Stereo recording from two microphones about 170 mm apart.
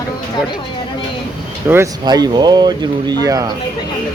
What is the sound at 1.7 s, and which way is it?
Speech, 15° right (ahead or behind).